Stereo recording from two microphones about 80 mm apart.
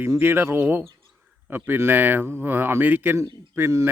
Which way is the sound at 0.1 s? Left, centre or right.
Right.